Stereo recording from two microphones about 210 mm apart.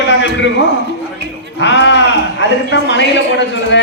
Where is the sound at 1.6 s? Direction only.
60° left (ahead or behind).